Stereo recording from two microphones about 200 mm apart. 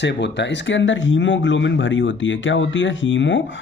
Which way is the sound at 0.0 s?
60° left (ahead or behind).